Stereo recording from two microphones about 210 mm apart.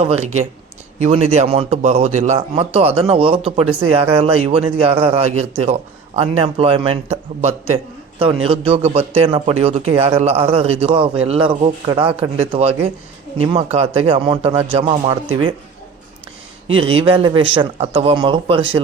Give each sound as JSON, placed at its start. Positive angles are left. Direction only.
{"t": 0.0, "sound": "a man's voice", "side_deg": -30}
{"t": 16.6, "sound": "a man's voice", "side_deg": -25}